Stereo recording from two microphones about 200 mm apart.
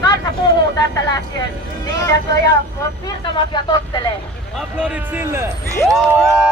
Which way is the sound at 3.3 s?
25° left (ahead or behind).